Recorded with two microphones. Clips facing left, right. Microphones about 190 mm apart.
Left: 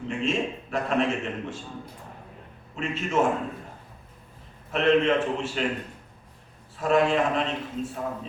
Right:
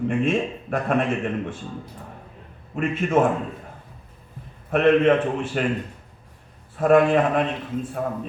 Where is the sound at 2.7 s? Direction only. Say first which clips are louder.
Right 6 dB; 55° right (ahead or behind).